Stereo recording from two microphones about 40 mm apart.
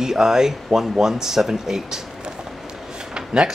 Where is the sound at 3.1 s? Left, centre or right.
Right.